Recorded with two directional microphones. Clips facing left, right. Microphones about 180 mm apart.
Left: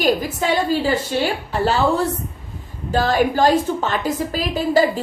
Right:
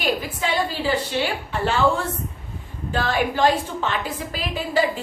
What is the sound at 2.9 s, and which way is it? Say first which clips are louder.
A woman's voice: left 5 dB; 40° left (ahead or behind).